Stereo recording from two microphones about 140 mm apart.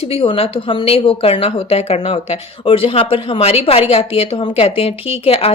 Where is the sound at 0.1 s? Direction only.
40° left (ahead or behind).